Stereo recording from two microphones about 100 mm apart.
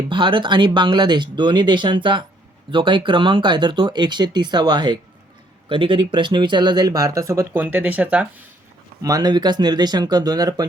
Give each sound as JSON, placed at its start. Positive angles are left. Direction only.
{"t": 0.1, "sound": "speech", "side_deg": -55}
{"t": 5.6, "sound": "speech", "side_deg": -55}
{"t": 9.0, "sound": "speech", "side_deg": -35}